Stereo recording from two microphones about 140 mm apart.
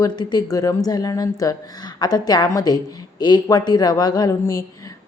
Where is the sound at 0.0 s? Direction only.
30° left (ahead or behind).